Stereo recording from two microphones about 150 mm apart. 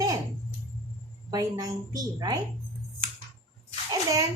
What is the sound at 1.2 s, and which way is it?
A woman's voice, 25° right (ahead or behind).